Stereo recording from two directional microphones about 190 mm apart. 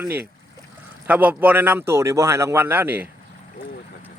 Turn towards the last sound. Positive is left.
turn(degrees=-10)  # may be behind; listen again after turning